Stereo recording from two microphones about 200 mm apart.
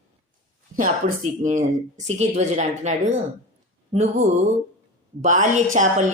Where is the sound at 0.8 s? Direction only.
40° right (ahead or behind).